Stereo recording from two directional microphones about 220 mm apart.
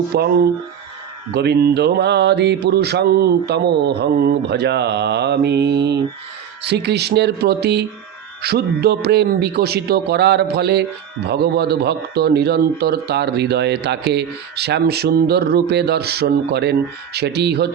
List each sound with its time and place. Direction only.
0.1 s a man's voice: 45° right (ahead or behind)